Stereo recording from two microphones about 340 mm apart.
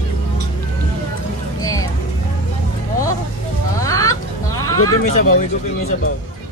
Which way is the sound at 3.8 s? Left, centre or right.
Centre.